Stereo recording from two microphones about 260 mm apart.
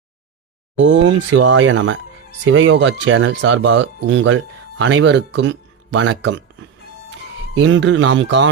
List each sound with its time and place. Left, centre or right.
0.8 s speech: right